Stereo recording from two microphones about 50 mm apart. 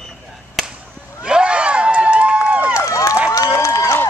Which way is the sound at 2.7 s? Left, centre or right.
Left.